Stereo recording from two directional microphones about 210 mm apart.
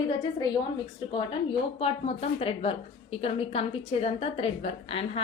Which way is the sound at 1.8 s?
30° left (ahead or behind).